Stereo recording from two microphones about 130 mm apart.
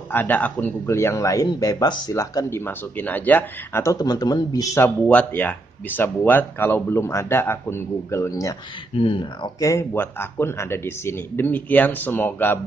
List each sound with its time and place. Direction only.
0.1 s speech: 15° left (ahead or behind); by 2.1 s 30° left (ahead or behind)
2.1 s speech: 20° left (ahead or behind)
8.9 s speech: 45° left (ahead or behind); by 12.5 s 15° left (ahead or behind)